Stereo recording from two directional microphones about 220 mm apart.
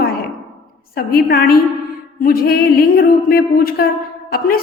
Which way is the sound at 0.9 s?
40° left (ahead or behind).